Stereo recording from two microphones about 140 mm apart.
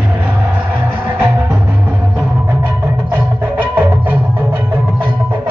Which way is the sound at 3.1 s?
10° right (ahead or behind).